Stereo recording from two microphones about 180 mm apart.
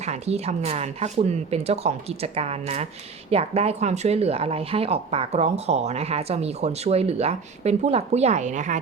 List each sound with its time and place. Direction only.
0.0 s speech: 35° right (ahead or behind)